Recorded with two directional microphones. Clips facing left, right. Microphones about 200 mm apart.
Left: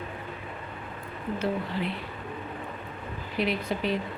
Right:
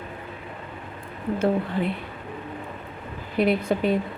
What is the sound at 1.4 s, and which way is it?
Speech, 50° right (ahead or behind).